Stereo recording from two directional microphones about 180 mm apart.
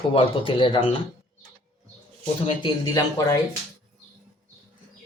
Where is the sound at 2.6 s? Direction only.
25° left (ahead or behind).